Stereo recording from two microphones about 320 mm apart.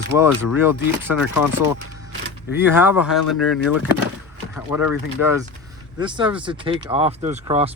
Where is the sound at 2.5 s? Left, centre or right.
Centre.